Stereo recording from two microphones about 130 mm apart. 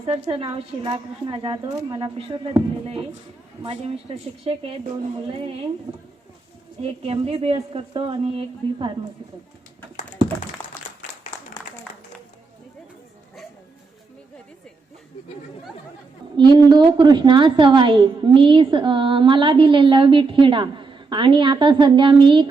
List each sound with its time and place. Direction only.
0.1 s speech: 50° right (ahead or behind)
6.8 s speech: 50° right (ahead or behind)
16.4 s a woman's voice: 35° right (ahead or behind)